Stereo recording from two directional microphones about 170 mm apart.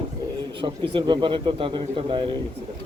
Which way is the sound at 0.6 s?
25° right (ahead or behind).